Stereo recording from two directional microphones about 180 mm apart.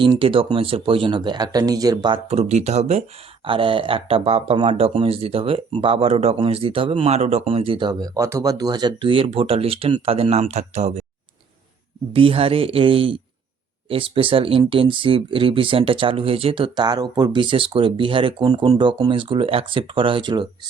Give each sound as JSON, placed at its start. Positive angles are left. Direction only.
{"t": 0.0, "sound": "speech", "side_deg": -30}
{"t": 12.1, "sound": "speech", "side_deg": -30}